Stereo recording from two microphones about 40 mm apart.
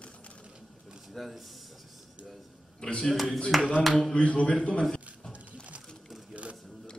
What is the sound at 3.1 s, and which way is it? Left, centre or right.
Speech, centre.